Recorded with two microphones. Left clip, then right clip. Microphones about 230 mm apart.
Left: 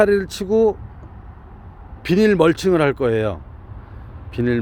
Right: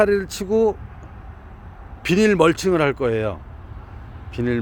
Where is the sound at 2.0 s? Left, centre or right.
Centre.